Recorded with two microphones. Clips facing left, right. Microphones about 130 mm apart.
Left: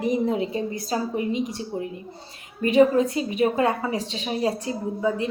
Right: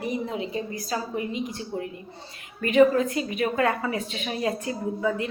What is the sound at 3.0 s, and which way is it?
Speech, 30° left (ahead or behind).